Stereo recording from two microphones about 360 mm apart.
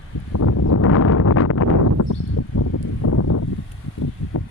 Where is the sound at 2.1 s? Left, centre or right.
Left.